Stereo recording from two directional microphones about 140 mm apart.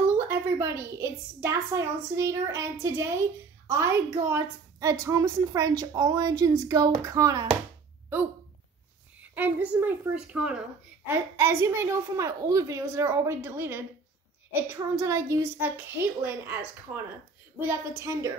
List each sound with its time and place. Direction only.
0.3 s a woman's voice: 15° right (ahead or behind)
9.2 s a woman's voice: 10° right (ahead or behind)